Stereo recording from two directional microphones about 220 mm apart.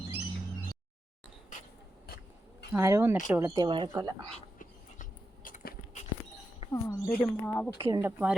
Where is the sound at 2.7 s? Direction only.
10° right (ahead or behind).